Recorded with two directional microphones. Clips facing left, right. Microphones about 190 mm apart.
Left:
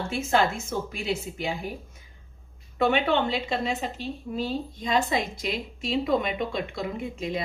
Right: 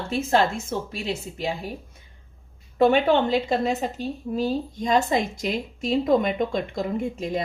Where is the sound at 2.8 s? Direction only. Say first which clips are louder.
Right 5 dB; 40° right (ahead or behind).